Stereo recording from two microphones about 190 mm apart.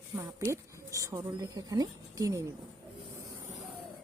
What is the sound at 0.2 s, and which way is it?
Speech, 15° right (ahead or behind).